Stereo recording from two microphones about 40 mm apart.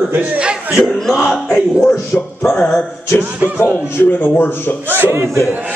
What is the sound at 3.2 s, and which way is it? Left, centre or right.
Speech, right.